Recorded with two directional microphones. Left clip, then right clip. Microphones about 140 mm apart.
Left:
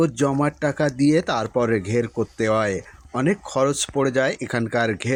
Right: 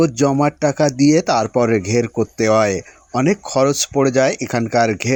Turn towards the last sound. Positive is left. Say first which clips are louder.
# right 6 dB
turn(degrees=-35)  # may be behind; listen again after turning